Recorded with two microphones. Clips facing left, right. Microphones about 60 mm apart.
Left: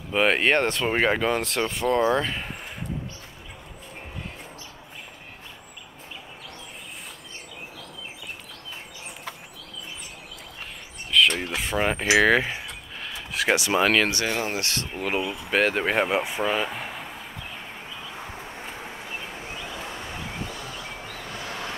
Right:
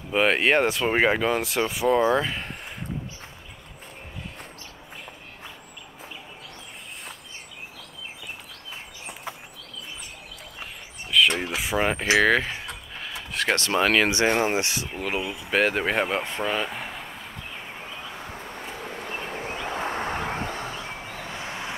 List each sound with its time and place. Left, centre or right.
0.1 s speech: centre
11.1 s speech: centre
13.0 s a sound: centre
14.1 s speech: right
14.8 s speech: centre
19.0 s a sound: right